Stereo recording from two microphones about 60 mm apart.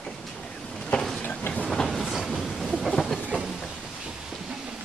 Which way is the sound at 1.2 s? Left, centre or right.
Left.